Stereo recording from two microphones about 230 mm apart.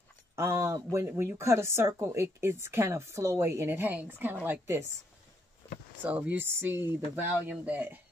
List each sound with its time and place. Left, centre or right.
0.4 s speech: centre
5.6 s speech: centre
6.0 s speech: centre